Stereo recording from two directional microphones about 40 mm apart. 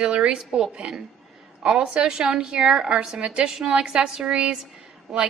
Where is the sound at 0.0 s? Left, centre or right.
Right.